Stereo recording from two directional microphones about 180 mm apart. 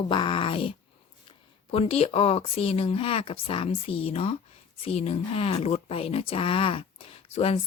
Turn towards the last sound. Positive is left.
turn(degrees=35)  # may be behind; listen again after turning